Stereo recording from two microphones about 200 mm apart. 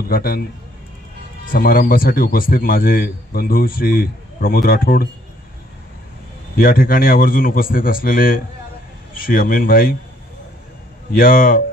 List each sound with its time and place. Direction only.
0.1 s speech: 50° left (ahead or behind)
6.5 s speech: 45° left (ahead or behind)
11.1 s speech: 45° left (ahead or behind)